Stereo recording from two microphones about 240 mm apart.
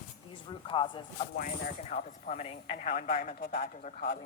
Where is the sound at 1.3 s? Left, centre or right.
Left.